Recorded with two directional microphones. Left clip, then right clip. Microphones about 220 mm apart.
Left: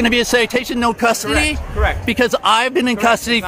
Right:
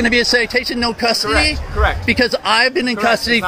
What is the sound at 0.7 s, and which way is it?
Speech, 25° left (ahead or behind).